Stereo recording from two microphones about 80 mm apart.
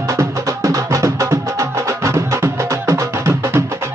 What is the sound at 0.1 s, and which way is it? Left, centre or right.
Music, right.